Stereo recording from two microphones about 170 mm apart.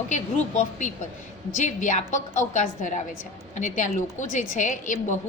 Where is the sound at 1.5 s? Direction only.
45° left (ahead or behind).